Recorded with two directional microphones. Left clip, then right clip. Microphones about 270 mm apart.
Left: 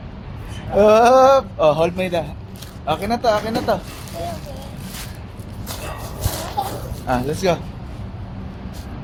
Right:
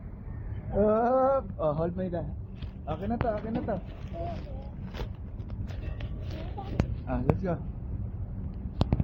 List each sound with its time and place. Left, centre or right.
0.7 s male singing: left
1.2 s speech: left
7.1 s male singing: left